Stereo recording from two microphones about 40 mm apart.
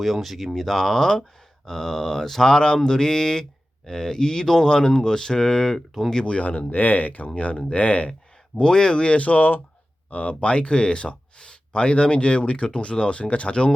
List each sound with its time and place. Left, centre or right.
0.0 s speech: centre
5.7 s speech: centre
6.2 s speech: left
7.3 s speech: left
8.5 s speech: left